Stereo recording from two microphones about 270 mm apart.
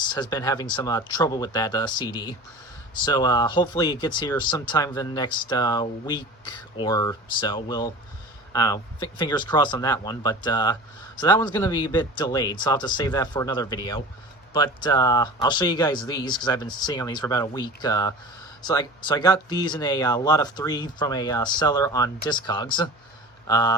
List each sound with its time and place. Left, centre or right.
0.1 s speech: centre